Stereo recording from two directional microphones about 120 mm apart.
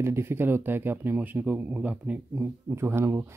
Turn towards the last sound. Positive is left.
turn(degrees=-20)  # may be behind; listen again after turning